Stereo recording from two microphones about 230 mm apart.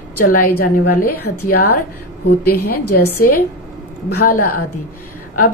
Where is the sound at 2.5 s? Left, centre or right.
Left.